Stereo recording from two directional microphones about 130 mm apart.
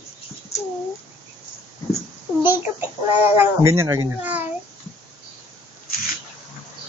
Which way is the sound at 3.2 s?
15° right (ahead or behind).